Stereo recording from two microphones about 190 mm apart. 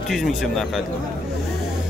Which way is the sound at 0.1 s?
Centre (ahead or behind).